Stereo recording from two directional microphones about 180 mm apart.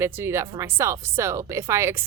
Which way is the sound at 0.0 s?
15° right (ahead or behind).